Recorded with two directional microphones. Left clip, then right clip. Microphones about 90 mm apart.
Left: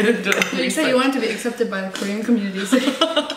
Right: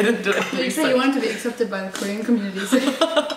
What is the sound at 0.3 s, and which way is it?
Speech, 15° right (ahead or behind).